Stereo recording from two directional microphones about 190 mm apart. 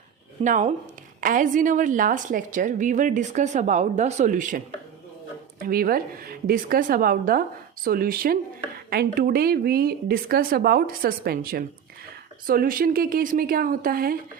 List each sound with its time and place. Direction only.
0.4 s a woman's voice: 40° right (ahead or behind)